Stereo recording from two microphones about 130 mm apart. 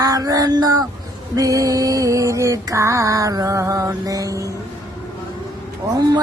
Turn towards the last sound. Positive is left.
turn(degrees=-25)  # may be behind; listen again after turning